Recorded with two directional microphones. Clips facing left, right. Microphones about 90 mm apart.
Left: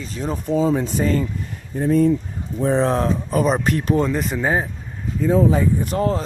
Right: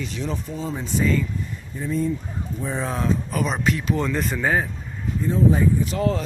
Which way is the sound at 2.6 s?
55° left (ahead or behind).